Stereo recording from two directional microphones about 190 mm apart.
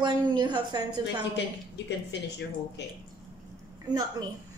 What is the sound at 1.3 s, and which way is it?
Speech, 65° left (ahead or behind).